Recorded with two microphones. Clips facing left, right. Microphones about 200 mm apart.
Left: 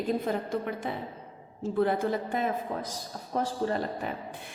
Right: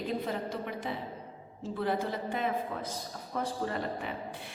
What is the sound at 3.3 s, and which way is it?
Speech, 35° left (ahead or behind).